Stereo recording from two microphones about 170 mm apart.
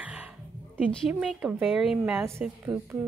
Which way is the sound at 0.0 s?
5° right (ahead or behind).